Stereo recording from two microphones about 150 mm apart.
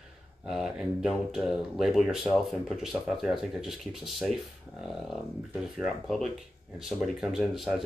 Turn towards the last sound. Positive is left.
turn(degrees=0)  # may be behind; listen again after turning